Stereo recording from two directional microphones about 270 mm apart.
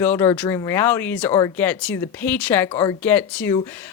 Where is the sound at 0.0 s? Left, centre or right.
Centre.